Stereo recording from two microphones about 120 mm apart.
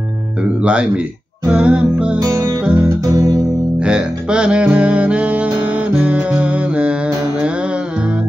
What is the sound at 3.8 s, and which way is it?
Music, 10° right (ahead or behind).